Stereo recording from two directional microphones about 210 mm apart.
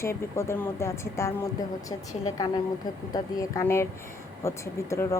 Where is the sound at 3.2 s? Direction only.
15° left (ahead or behind).